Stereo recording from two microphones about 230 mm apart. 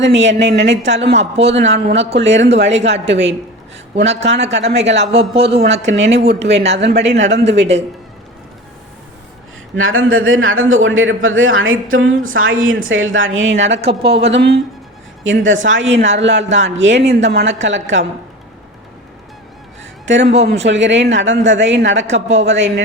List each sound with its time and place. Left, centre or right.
0.0 s speech: right
1.1 s speech: right
1.5 s speech: right
3.1 s speech: right
4.0 s speech: right
5.3 s speech: right
5.8 s speech: right
7.6 s speech: right
9.7 s a man's voice: right
13.8 s speech: right
14.3 s a man's voice: right
20.1 s speech: right